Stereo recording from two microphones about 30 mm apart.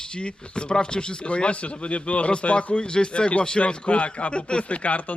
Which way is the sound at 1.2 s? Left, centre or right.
Left.